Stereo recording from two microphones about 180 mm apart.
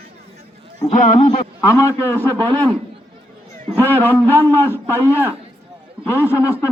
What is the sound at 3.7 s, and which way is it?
A man's voice, 10° left (ahead or behind).